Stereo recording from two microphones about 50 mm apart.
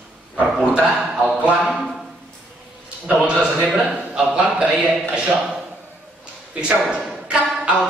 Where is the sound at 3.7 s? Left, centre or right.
Centre.